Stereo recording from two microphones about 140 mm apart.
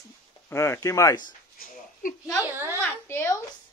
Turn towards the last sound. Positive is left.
turn(degrees=15)  # may be behind; listen again after turning